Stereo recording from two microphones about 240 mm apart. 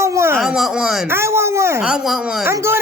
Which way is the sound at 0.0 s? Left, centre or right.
Centre.